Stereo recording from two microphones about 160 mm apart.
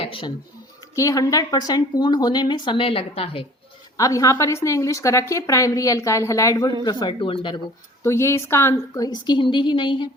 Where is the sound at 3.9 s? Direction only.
20° left (ahead or behind).